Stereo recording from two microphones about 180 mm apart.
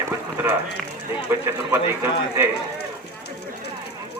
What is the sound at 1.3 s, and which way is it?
A man's voice, 15° right (ahead or behind).